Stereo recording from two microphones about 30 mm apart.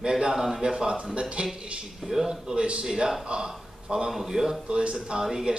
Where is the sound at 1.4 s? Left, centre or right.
Right.